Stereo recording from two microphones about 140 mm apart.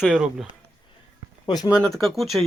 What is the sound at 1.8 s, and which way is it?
Speech, centre (ahead or behind).